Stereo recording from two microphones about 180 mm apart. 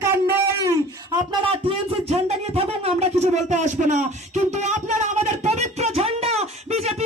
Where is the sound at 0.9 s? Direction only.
30° right (ahead or behind).